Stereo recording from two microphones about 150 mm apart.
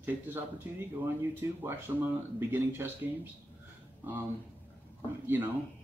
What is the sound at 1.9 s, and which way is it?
Speech, 15° right (ahead or behind).